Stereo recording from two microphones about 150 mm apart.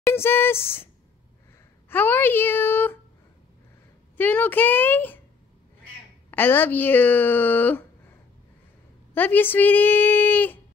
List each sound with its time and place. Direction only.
0.0 s speech: 15° left (ahead or behind)
1.9 s a woman's voice: 15° left (ahead or behind)
4.2 s a woman's voice: 10° left (ahead or behind)
6.3 s a woman's voice: 15° left (ahead or behind)
9.1 s a woman's voice: 15° left (ahead or behind)